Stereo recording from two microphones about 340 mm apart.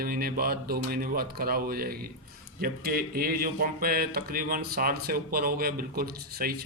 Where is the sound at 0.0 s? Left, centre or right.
Right.